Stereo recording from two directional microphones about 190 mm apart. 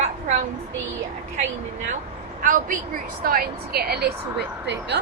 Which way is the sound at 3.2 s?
50° right (ahead or behind).